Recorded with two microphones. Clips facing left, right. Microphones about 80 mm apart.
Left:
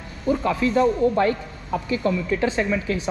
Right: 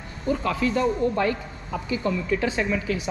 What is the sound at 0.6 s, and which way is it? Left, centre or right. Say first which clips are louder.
Speech: left 5 dB; left.